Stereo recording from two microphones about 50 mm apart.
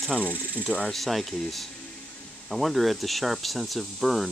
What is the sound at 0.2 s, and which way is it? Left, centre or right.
Cricket, left.